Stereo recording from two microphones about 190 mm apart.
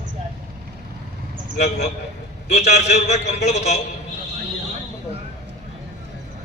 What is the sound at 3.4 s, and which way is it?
Speech, 35° left (ahead or behind).